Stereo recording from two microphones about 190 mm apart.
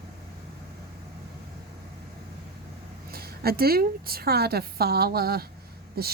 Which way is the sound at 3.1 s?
55° right (ahead or behind).